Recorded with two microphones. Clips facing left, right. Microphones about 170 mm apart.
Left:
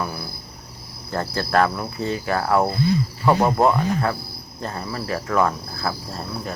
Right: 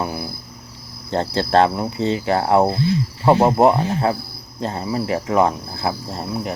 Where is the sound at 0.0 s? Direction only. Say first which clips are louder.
Right 4 dB; 20° right (ahead or behind).